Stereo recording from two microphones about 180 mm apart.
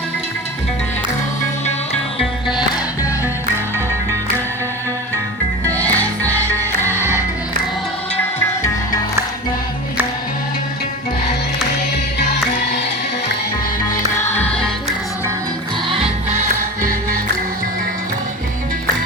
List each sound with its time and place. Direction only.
2.1 s music: centre (ahead or behind)
5.7 s music: 10° left (ahead or behind)
14.3 s music: 5° left (ahead or behind)